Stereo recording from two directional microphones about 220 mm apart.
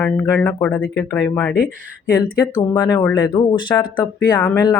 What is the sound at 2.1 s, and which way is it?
Speech, 15° left (ahead or behind).